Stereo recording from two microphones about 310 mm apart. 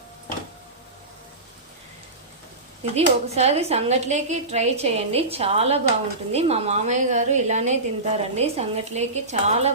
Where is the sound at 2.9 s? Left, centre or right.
Centre.